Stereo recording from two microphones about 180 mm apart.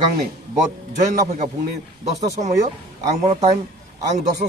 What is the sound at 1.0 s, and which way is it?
A man's voice, 45° right (ahead or behind).